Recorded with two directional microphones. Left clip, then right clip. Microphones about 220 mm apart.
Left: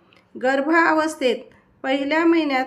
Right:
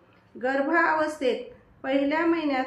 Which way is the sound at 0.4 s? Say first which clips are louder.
Left 5 dB; 55° left (ahead or behind).